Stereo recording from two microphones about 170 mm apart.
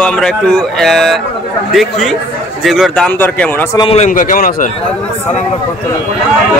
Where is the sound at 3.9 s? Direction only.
45° left (ahead or behind).